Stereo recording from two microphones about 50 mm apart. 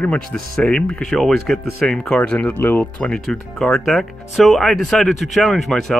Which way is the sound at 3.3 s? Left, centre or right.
Centre.